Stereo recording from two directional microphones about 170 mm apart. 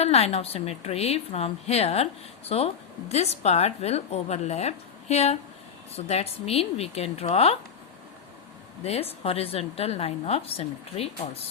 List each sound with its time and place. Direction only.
0.0 s a woman's voice: 40° left (ahead or behind)
8.8 s a woman's voice: 35° left (ahead or behind)